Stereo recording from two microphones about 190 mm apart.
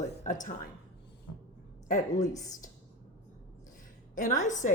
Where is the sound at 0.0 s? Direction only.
40° left (ahead or behind).